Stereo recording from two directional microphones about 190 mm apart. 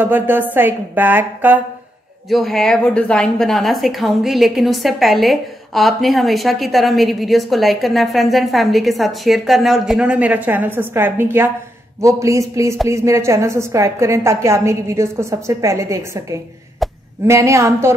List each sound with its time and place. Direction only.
0.0 s a woman's voice: 10° right (ahead or behind)
2.2 s a woman's voice: centre (ahead or behind); by 16.3 s 15° right (ahead or behind)
16.8 s a sound: centre (ahead or behind)
17.3 s a woman's voice: 15° right (ahead or behind)